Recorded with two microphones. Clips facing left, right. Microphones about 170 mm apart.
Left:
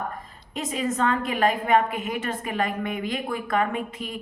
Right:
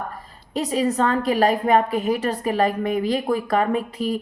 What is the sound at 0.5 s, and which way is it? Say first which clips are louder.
A woman's voice: right 6 dB; 35° right (ahead or behind).